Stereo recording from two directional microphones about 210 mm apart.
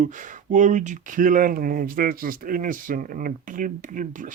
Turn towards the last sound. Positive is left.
turn(degrees=-40)  # may be behind; listen again after turning